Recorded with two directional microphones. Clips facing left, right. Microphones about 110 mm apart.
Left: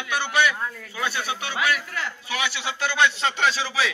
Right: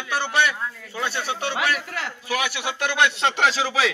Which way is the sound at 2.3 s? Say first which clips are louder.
Right 4 dB; 50° right (ahead or behind).